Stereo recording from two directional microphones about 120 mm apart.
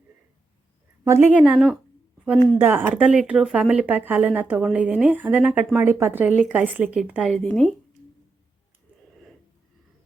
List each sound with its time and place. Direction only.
1.0 s a woman's voice: 20° right (ahead or behind)
1.5 s a woman's voice: 5° right (ahead or behind)
2.2 s a woman's voice: 15° right (ahead or behind)